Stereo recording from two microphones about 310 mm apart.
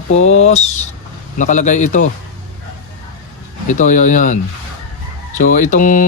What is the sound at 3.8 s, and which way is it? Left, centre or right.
Speech, left.